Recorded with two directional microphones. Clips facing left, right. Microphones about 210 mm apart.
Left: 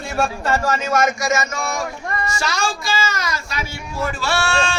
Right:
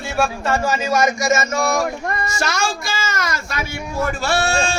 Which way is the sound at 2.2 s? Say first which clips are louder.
Left 1 dB; 45° right (ahead or behind).